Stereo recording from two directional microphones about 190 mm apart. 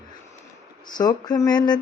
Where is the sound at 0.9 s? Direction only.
20° left (ahead or behind).